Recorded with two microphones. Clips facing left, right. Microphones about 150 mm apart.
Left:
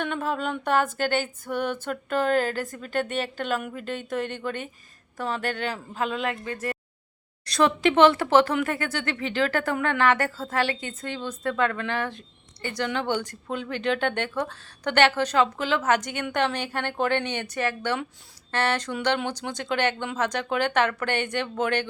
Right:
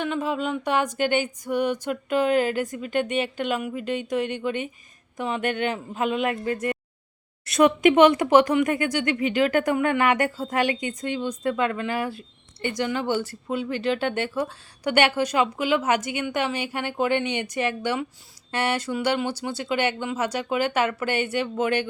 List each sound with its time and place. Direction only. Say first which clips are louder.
0.0 s speech: right 2 dB; 5° right (ahead or behind)
7.5 s speech: right 4 dB; 15° right (ahead or behind)